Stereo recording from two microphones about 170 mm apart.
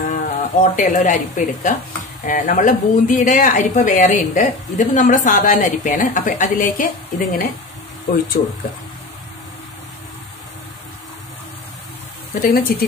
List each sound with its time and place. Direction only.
0.0 s speech: 50° left (ahead or behind)
8.1 s speech: 65° left (ahead or behind)
12.4 s speech: 55° left (ahead or behind)